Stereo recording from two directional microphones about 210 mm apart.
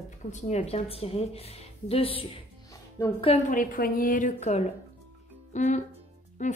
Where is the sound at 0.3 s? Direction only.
35° left (ahead or behind).